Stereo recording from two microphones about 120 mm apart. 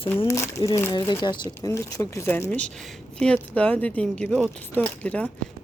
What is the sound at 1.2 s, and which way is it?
Speech, 40° left (ahead or behind).